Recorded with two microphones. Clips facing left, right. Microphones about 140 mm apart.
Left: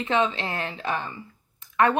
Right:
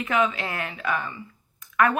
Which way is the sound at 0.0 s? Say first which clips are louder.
Even; 25° left (ahead or behind).